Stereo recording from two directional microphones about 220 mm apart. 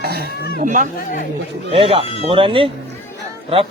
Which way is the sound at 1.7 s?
25° right (ahead or behind).